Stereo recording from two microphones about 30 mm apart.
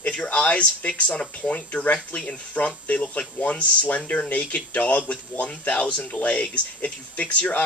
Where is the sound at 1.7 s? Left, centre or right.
Left.